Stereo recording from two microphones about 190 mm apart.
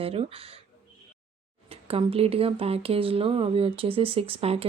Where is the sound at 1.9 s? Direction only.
30° right (ahead or behind).